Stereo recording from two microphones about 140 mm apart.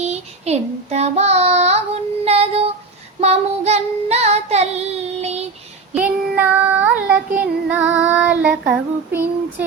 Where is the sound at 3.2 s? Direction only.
50° right (ahead or behind).